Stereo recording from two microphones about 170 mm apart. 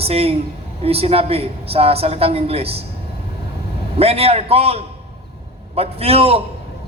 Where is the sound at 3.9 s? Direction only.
35° right (ahead or behind).